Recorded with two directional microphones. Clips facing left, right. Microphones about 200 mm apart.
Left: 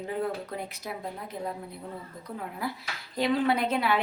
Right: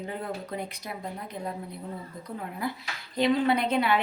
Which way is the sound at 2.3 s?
5° left (ahead or behind).